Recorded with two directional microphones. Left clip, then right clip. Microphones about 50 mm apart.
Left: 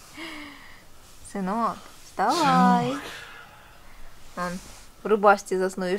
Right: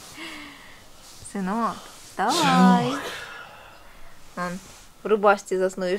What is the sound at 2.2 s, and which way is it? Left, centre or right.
Speech, right.